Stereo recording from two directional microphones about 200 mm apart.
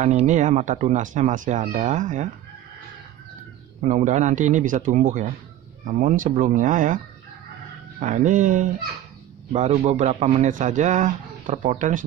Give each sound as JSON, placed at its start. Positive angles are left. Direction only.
{"t": 0.0, "sound": "a man's voice", "side_deg": -35}
{"t": 3.8, "sound": "a man's voice", "side_deg": -35}
{"t": 8.0, "sound": "a man's voice", "side_deg": -40}